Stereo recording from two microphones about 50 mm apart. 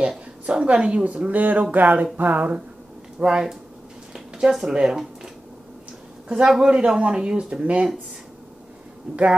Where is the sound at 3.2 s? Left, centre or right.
Centre.